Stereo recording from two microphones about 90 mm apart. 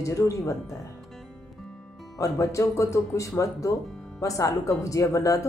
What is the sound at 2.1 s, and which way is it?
Speech, 40° left (ahead or behind).